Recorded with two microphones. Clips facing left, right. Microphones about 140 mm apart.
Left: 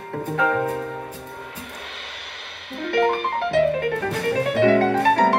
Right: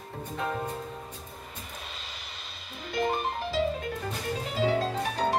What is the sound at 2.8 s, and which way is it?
Music, 65° left (ahead or behind).